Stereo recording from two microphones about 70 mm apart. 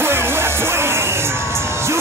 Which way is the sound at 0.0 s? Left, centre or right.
Right.